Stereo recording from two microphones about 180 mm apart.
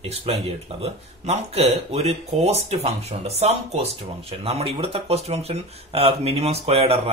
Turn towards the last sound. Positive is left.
turn(degrees=-35)  # may be behind; listen again after turning